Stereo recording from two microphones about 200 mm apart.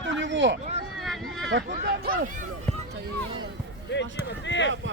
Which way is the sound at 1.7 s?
45° right (ahead or behind).